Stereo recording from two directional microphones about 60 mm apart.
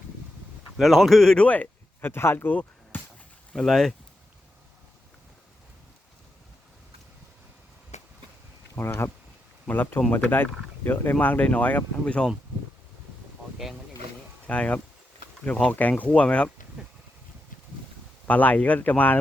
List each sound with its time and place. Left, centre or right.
0.8 s speech: centre
1.5 s speech: left
2.9 s a sound: left
3.5 s speech: centre
8.8 s speech: left
9.6 s speech: left; by 12.3 s centre
14.4 s speech: left
18.3 s speech: left